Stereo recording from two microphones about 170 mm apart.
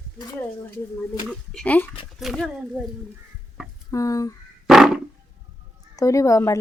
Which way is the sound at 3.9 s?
20° left (ahead or behind).